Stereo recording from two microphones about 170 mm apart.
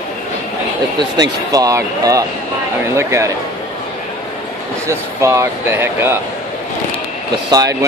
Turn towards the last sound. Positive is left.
turn(degrees=-20)  # may be behind; listen again after turning